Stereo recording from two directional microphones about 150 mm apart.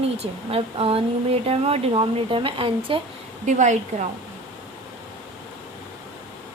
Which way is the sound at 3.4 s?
55° right (ahead or behind).